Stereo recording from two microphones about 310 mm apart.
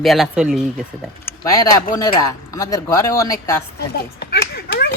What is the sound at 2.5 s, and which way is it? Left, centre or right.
Speech, centre.